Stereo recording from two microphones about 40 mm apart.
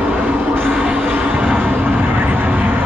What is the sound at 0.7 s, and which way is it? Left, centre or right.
Vehicle, right.